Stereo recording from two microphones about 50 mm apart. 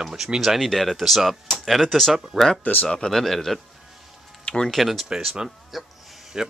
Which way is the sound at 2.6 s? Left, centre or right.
Left.